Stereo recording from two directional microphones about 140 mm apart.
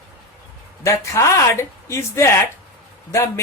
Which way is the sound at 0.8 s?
20° left (ahead or behind).